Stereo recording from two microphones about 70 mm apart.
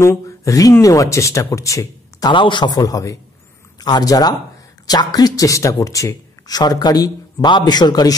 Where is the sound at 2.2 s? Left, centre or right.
Left.